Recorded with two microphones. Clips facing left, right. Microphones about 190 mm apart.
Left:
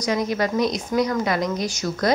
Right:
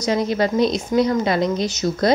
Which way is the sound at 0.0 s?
30° right (ahead or behind).